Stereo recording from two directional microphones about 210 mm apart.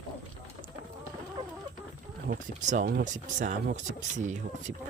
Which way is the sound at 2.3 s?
35° right (ahead or behind).